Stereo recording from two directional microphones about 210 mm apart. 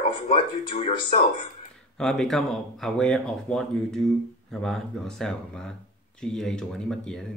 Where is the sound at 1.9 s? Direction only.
Centre (ahead or behind).